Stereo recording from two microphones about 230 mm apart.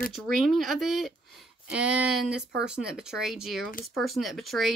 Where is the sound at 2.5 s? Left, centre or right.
Right.